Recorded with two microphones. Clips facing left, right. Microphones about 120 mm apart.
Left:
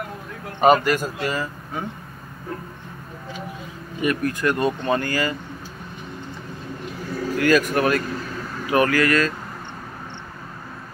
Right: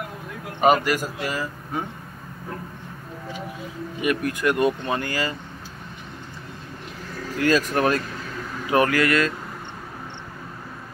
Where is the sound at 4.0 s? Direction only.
10° right (ahead or behind).